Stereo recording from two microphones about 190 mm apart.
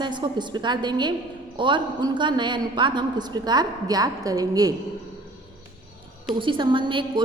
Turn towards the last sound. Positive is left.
turn(degrees=-25)  # may be behind; listen again after turning